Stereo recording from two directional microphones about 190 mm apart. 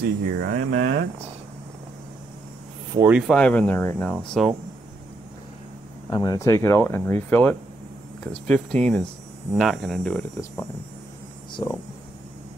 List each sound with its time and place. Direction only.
0.0 s speech: 55° right (ahead or behind)
3.0 s speech: 5° right (ahead or behind)
3.3 s speech: 5° left (ahead or behind)
6.0 s speech: 20° left (ahead or behind)
11.6 s speech: 20° left (ahead or behind)